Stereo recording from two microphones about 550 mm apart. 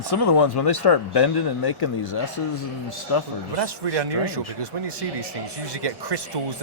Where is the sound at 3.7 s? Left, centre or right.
Right.